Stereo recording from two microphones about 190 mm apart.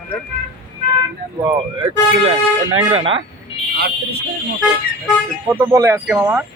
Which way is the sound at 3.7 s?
60° right (ahead or behind).